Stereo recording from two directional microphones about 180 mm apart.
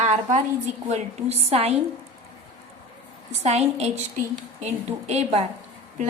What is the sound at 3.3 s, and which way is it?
A woman's voice, 35° right (ahead or behind).